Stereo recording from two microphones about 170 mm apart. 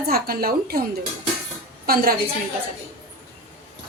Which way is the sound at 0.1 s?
60° right (ahead or behind).